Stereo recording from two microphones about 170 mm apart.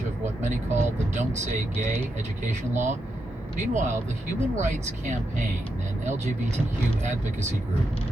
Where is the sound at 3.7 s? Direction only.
45° right (ahead or behind).